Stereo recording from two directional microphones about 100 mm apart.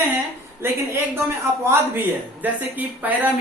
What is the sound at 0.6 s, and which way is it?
A man's voice, 25° right (ahead or behind).